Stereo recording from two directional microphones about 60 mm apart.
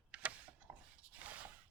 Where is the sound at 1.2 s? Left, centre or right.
Right.